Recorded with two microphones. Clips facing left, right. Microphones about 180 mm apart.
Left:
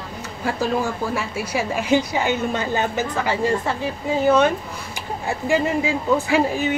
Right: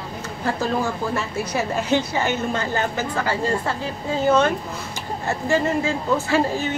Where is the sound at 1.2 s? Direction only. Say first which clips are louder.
Even; 10° left (ahead or behind).